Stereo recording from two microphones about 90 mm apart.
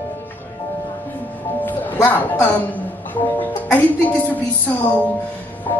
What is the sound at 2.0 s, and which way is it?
Speech, 20° left (ahead or behind).